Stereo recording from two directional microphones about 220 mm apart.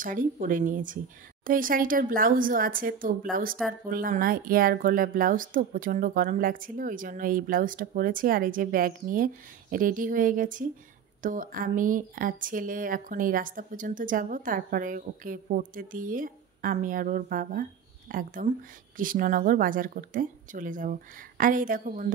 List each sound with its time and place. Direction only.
0.0 s speech: 35° right (ahead or behind)